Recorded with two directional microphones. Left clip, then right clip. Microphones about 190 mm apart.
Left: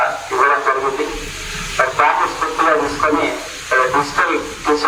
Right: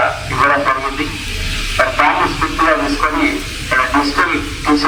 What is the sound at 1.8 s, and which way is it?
Speech, 40° left (ahead or behind).